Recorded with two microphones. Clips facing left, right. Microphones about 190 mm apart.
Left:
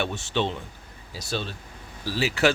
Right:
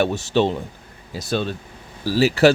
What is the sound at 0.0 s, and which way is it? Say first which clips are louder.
Speech: right 8 dB; 40° right (ahead or behind).